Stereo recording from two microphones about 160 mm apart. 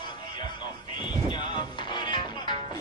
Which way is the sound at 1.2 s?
30° left (ahead or behind).